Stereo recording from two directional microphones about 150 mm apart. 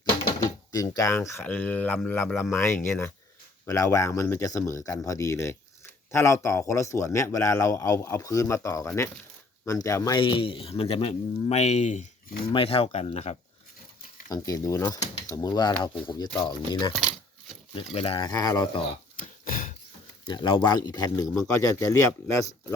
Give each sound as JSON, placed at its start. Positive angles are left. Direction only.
{"t": 0.3, "sound": "speech", "side_deg": 25}
{"t": 12.5, "sound": "speech", "side_deg": 40}
{"t": 14.3, "sound": "speech", "side_deg": 25}
{"t": 14.9, "sound": "speech", "side_deg": 50}
{"t": 15.3, "sound": "speech", "side_deg": 25}
{"t": 17.7, "sound": "speech", "side_deg": 40}
{"t": 18.3, "sound": "speech", "side_deg": 25}
{"t": 19.1, "sound": "a sound", "side_deg": 60}
{"t": 20.2, "sound": "speech", "side_deg": 30}